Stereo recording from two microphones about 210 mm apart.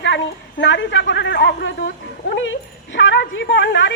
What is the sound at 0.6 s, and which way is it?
Speech, 60° left (ahead or behind).